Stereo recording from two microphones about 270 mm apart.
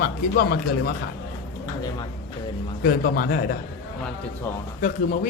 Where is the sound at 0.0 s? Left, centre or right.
Left.